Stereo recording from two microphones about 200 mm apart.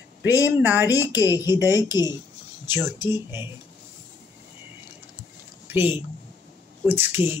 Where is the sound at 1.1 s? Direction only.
20° left (ahead or behind).